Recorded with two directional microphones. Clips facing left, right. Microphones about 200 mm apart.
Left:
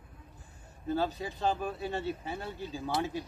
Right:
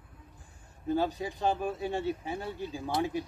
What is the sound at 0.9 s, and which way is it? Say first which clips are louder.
Speech: right 2 dB; 15° right (ahead or behind).